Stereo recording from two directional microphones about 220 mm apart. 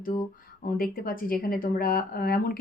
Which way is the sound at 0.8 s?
40° left (ahead or behind).